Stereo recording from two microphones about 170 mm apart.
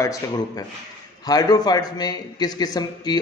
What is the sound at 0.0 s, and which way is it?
A man's voice, 20° left (ahead or behind).